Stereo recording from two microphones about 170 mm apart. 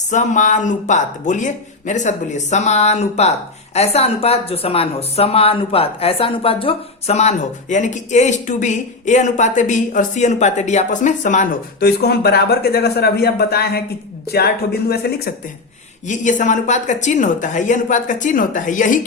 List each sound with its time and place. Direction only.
0.1 s speech: 45° left (ahead or behind)
11.8 s speech: 70° left (ahead or behind)
16.0 s speech: 45° left (ahead or behind)